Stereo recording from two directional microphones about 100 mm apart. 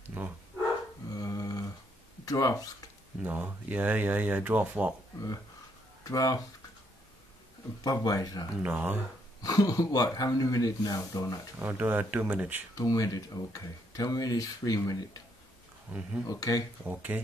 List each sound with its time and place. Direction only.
0.1 s bow-wow: 20° right (ahead or behind)
1.1 s a sound: 40° left (ahead or behind)
2.2 s speech: 35° left (ahead or behind)
3.2 s speech: 20° right (ahead or behind)
6.0 s speech: 35° left (ahead or behind)
7.8 s speech: 40° left (ahead or behind)
8.6 s speech: 15° right (ahead or behind)
9.4 s speech: 40° left (ahead or behind)
11.6 s speech: 20° right (ahead or behind)
12.7 s speech: 35° left (ahead or behind)
15.9 s speech: 10° right (ahead or behind)
16.3 s speech: 35° left (ahead or behind)
16.8 s speech: 15° right (ahead or behind)